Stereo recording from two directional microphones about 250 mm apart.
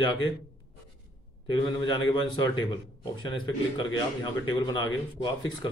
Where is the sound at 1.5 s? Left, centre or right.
Centre.